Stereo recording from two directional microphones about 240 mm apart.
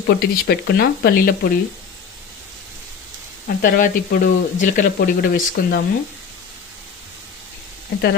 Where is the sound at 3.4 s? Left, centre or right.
Left.